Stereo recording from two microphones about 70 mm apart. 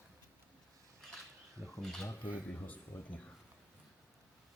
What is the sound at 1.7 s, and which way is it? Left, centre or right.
Speech, centre.